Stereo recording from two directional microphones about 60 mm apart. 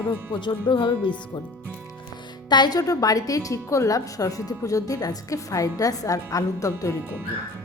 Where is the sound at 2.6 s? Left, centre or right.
Left.